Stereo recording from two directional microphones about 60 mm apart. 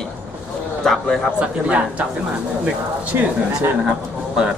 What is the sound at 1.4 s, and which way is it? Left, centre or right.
Speech, centre.